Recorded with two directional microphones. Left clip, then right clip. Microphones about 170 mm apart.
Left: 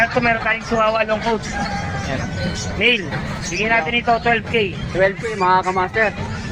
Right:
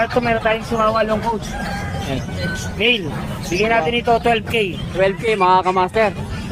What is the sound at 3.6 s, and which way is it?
Speech, 65° right (ahead or behind).